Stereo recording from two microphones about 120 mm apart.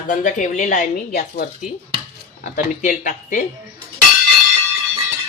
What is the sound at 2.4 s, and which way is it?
Speech, 90° left.